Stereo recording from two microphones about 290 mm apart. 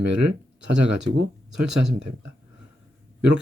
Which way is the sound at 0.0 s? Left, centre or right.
Right.